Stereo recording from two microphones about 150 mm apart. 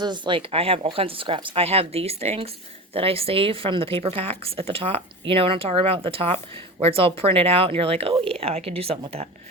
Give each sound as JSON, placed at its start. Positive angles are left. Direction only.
{"t": 0.0, "sound": "speech", "side_deg": -30}